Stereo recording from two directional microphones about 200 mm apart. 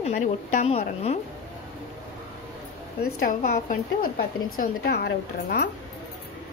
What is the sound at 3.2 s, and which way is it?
A woman's voice, 45° left (ahead or behind).